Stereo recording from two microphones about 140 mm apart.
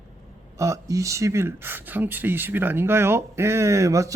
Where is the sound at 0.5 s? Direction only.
20° right (ahead or behind).